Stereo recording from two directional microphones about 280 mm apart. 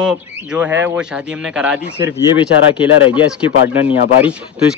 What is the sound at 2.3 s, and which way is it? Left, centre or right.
Speech, centre.